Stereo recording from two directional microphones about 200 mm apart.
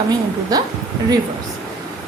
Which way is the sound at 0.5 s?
20° right (ahead or behind).